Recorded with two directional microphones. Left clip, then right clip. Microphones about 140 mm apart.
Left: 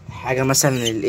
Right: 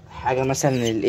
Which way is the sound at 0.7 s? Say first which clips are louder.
Left 1 dB; 15° right (ahead or behind).